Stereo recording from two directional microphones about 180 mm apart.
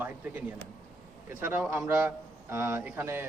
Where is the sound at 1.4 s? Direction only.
10° right (ahead or behind).